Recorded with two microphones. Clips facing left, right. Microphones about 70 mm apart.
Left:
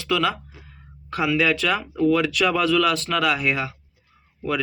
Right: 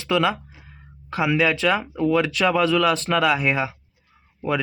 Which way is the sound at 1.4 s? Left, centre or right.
Centre.